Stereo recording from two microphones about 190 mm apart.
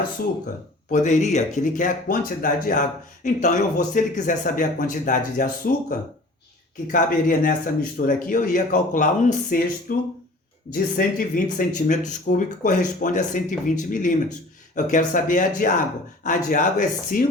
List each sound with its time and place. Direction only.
0.9 s speech: 40° left (ahead or behind)
6.9 s speech: 45° left (ahead or behind)